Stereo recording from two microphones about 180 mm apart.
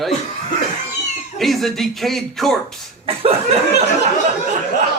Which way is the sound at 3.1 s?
35° right (ahead or behind).